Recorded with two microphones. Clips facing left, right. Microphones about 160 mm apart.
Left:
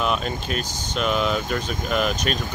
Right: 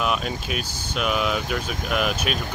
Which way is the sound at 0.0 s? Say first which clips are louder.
Left 1 dB; 5° right (ahead or behind).